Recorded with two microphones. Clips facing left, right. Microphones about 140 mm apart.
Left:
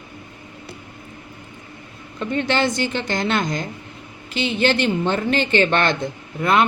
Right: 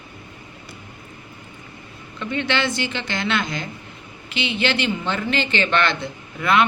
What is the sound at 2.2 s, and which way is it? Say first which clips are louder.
A man's voice: left 3 dB; 40° left (ahead or behind).